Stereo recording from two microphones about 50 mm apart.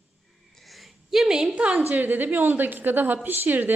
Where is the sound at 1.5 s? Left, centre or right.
Right.